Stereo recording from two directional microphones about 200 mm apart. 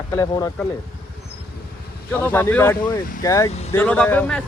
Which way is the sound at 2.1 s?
10° left (ahead or behind).